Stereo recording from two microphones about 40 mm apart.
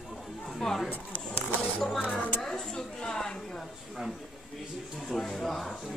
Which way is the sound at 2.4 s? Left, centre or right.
Centre.